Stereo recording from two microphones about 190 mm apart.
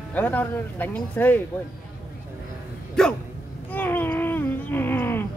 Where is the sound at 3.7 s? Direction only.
10° left (ahead or behind).